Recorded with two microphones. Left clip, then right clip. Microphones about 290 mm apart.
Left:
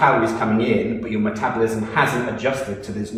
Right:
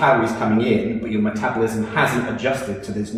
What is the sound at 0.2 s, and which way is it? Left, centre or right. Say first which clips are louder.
A man's voice: even; centre.